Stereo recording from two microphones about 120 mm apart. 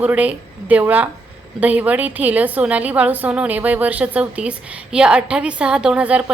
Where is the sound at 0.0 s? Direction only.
10° right (ahead or behind).